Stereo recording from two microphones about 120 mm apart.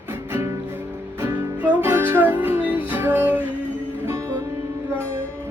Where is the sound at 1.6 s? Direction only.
15° right (ahead or behind).